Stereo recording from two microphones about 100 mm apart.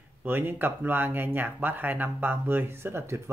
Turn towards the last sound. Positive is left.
turn(degrees=-25)  # may be behind; listen again after turning